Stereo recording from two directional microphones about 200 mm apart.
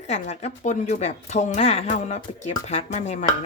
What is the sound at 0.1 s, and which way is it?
Speech, 35° left (ahead or behind).